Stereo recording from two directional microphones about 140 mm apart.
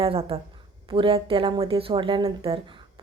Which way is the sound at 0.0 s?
40° right (ahead or behind).